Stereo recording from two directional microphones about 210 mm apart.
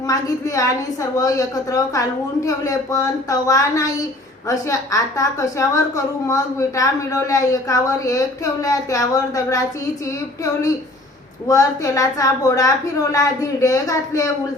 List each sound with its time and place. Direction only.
0.1 s a woman's voice: 15° left (ahead or behind)
11.4 s a woman's voice: 15° left (ahead or behind)